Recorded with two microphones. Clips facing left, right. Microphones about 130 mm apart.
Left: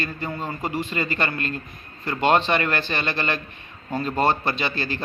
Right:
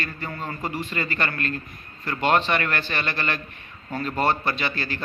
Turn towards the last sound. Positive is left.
turn(degrees=25)  # may be behind; listen again after turning